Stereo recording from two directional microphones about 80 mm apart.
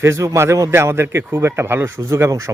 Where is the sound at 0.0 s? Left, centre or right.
Right.